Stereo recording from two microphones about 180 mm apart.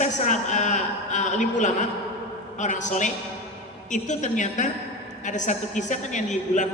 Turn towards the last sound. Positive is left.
turn(degrees=45)  # may be behind; listen again after turning